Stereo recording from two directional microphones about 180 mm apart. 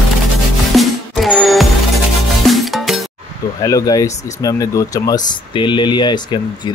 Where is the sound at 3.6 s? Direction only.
20° left (ahead or behind).